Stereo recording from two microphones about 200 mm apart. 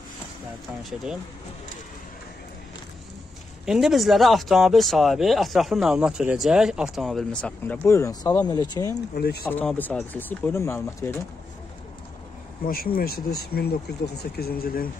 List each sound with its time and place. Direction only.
3.6 s speech: centre (ahead or behind); by 8.9 s 20° left (ahead or behind)
9.1 s speech: 50° left (ahead or behind)
9.5 s speech: 10° left (ahead or behind)
12.6 s speech: 50° left (ahead or behind)